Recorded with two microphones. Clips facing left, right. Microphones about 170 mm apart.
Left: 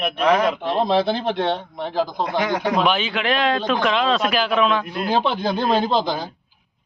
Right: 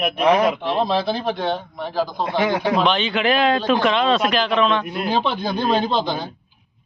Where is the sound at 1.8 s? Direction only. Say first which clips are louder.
Even; 20° left (ahead or behind).